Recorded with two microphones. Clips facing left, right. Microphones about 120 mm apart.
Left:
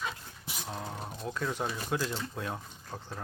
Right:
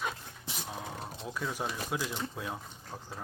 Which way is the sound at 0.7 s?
5° right (ahead or behind).